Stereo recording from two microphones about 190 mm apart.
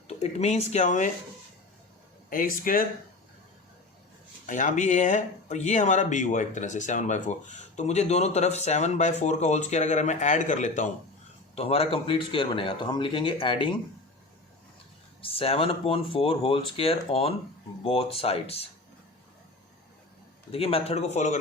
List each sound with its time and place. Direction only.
0.1 s speech: 35° left (ahead or behind)
2.3 s speech: 45° left (ahead or behind)
4.4 s speech: 40° left (ahead or behind)
15.2 s speech: 30° left (ahead or behind)
20.5 s speech: 30° left (ahead or behind)